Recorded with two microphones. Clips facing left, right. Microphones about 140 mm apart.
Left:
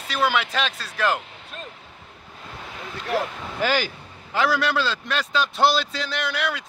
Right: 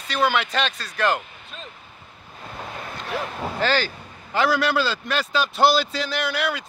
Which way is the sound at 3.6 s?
10° left (ahead or behind).